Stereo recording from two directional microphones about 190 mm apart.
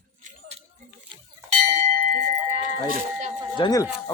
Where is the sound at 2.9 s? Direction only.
40° right (ahead or behind).